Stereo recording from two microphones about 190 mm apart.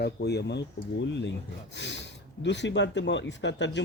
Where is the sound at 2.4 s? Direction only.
70° left (ahead or behind).